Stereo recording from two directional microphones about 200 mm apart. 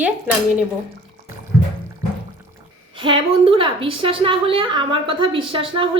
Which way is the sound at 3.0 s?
25° right (ahead or behind).